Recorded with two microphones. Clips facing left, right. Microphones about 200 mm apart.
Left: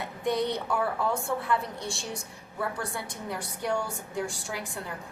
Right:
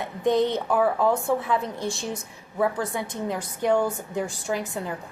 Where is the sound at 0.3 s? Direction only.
20° right (ahead or behind).